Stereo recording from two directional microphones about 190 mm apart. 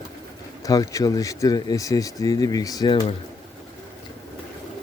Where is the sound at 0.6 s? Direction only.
20° left (ahead or behind).